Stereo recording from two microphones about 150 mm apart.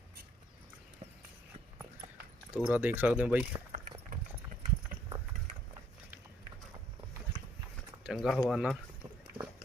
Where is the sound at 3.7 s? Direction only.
55° right (ahead or behind).